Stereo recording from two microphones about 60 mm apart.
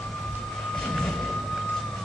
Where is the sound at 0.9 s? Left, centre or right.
Centre.